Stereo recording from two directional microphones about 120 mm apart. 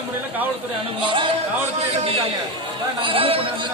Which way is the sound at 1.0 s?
45° right (ahead or behind).